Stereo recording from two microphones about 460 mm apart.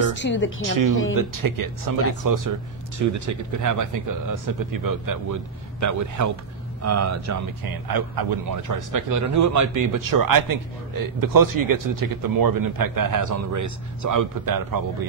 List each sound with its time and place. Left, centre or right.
0.1 s speech: left
0.7 s a man's voice: right
7.6 s a man's voice: right